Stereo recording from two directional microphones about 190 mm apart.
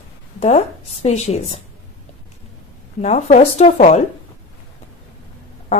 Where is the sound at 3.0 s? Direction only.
40° left (ahead or behind).